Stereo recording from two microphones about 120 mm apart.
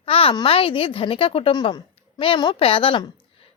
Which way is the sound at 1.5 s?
40° left (ahead or behind).